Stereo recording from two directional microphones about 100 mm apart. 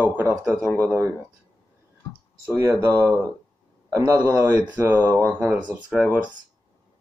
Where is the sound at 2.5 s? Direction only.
25° right (ahead or behind).